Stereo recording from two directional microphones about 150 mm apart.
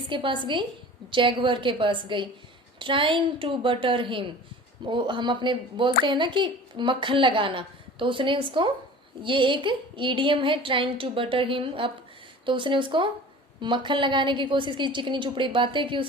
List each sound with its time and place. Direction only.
0.1 s a woman's voice: 35° right (ahead or behind)